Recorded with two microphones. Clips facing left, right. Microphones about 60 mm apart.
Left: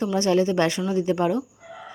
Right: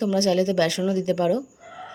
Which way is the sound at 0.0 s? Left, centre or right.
Left.